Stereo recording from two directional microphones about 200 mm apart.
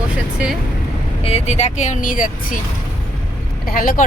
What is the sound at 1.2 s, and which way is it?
Speech, 30° left (ahead or behind).